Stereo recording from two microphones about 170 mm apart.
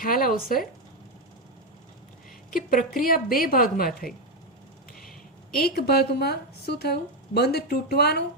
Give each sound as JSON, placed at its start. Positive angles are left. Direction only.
{"t": 0.0, "sound": "a woman's voice", "side_deg": 55}
{"t": 2.5, "sound": "a woman's voice", "side_deg": 55}
{"t": 5.5, "sound": "a woman's voice", "side_deg": 65}